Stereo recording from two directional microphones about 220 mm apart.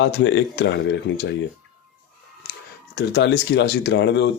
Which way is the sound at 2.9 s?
50° left (ahead or behind).